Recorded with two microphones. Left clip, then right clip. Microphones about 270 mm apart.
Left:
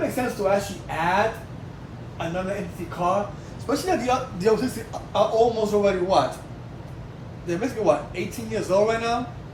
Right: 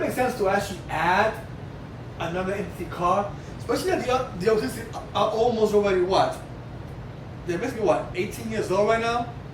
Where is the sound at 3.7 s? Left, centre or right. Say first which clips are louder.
Left 1 dB; centre.